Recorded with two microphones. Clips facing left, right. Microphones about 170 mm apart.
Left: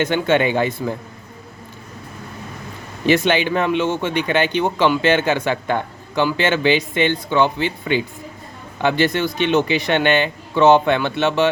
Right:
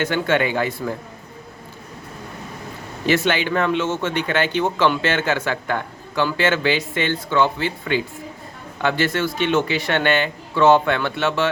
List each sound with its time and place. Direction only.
0.0 s speech: 20° left (ahead or behind)
3.1 s speech: 20° left (ahead or behind)